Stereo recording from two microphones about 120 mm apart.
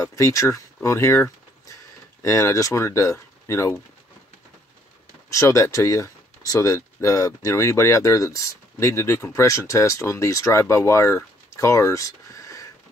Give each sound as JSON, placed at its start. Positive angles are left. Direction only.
{"t": 0.0, "sound": "speech", "side_deg": 30}
{"t": 0.8, "sound": "a sound", "side_deg": 25}
{"t": 2.2, "sound": "speech", "side_deg": 25}
{"t": 5.3, "sound": "speech", "side_deg": 25}